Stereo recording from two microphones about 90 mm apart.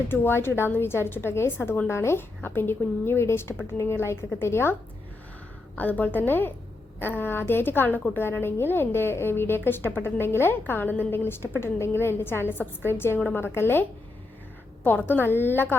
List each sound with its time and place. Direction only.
0.1 s a woman's voice: 25° left (ahead or behind)
14.8 s a woman's voice: 20° left (ahead or behind)